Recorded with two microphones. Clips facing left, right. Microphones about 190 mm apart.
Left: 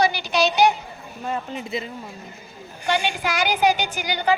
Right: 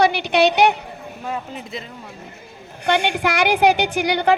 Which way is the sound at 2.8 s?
65° right (ahead or behind).